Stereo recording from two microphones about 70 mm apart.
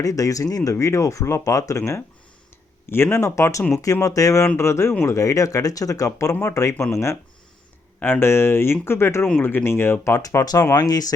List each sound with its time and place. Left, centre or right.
0.0 s speech: left
2.9 s speech: left
6.1 s speech: left
7.9 s speech: left
10.2 s speech: left